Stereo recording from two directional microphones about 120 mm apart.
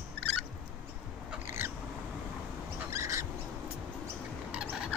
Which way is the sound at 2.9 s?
25° right (ahead or behind).